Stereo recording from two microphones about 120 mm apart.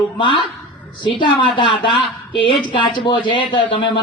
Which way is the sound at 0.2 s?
45° left (ahead or behind).